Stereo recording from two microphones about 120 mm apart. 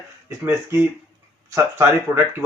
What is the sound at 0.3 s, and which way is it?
Speech, 25° right (ahead or behind).